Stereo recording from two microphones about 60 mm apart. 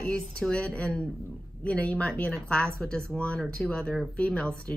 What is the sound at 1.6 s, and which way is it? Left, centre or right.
Speech, left.